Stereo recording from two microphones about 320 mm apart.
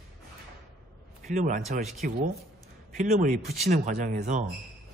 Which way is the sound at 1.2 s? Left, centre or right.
Right.